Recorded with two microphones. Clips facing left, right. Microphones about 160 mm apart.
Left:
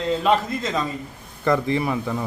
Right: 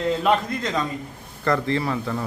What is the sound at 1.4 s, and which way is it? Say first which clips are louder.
Speech: left 2 dB; 15° left (ahead or behind).